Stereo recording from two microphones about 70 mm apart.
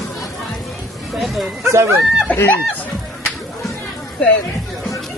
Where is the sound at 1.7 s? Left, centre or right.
Right.